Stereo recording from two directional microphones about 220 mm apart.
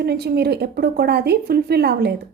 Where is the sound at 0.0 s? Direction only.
45° right (ahead or behind).